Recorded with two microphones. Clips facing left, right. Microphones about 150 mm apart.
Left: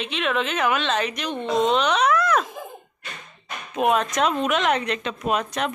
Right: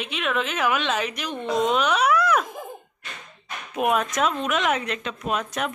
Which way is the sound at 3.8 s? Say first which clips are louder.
Left 2 dB; 5° right (ahead or behind).